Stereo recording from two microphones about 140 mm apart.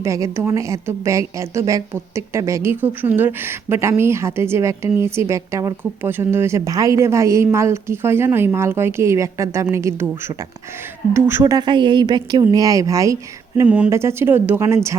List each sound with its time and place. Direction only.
0.0 s a woman's voice: 20° right (ahead or behind)
13.7 s speech: 10° right (ahead or behind)